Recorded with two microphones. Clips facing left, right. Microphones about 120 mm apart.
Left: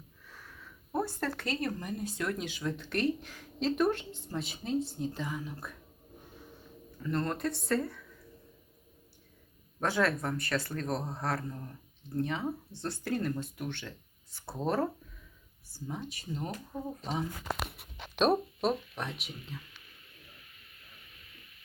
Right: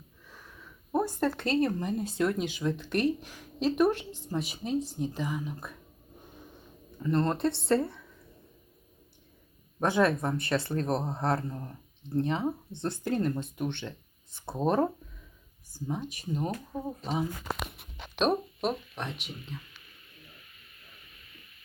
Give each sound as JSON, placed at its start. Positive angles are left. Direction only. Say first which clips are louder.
{"t": 0.3, "sound": "speech", "louder": "right 1 dB", "side_deg": -15}
{"t": 7.0, "sound": "speech", "louder": "right 5 dB", "side_deg": -20}
{"t": 9.8, "sound": "speech", "louder": "right 4 dB", "side_deg": -20}
{"t": 15.9, "sound": "speech", "louder": "right 5 dB", "side_deg": -20}
{"t": 18.2, "sound": "speech", "louder": "even", "side_deg": 0}